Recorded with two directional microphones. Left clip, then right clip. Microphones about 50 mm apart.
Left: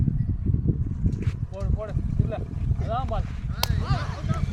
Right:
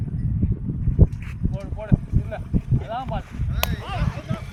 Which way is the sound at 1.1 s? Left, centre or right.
Right.